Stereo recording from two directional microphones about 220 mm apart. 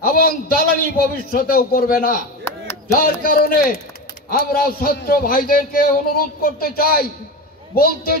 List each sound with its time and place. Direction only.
0.0 s a man's voice: 40° left (ahead or behind)